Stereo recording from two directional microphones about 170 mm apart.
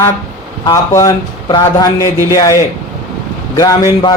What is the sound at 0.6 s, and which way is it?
Speech, 20° left (ahead or behind).